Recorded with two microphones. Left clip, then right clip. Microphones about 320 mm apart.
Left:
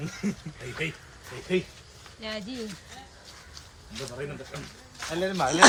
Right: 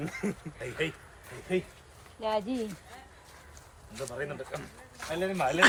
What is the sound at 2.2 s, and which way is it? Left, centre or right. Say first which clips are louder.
Speech: right 6 dB; centre.